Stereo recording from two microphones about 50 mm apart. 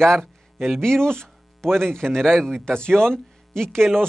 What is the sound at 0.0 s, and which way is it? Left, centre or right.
Speech, centre.